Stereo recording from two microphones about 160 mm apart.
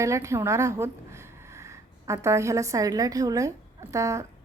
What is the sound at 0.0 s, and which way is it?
A woman's voice, 20° right (ahead or behind).